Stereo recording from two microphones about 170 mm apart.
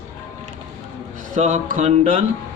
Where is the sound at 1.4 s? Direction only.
45° right (ahead or behind).